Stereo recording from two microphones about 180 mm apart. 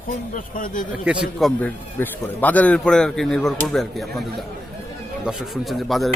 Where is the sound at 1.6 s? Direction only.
10° left (ahead or behind).